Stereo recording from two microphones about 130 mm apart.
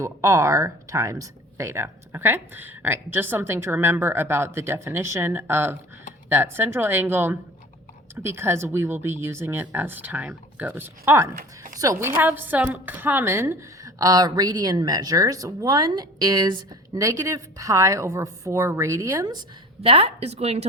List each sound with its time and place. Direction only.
0.0 s a woman's voice: 20° right (ahead or behind)
19.8 s a woman's voice: 45° right (ahead or behind)